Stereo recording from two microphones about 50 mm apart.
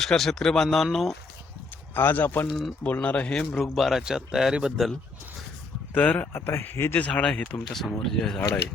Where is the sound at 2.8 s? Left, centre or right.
Left.